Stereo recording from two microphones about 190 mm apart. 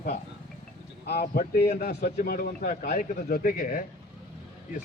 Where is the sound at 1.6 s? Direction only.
35° left (ahead or behind).